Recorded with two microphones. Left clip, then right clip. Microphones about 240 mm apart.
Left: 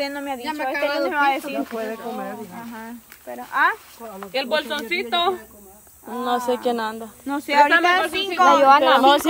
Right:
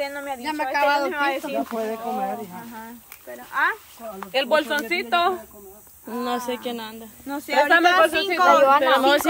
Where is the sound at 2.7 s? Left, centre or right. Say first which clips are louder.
Left 2 dB; left.